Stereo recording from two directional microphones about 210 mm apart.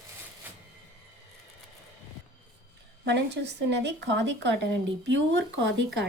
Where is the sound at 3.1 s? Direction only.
55° right (ahead or behind).